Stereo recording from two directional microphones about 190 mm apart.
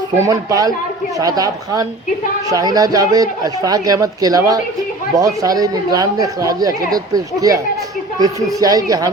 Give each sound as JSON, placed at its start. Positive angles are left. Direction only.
{"t": 0.2, "sound": "a man's voice", "side_deg": -20}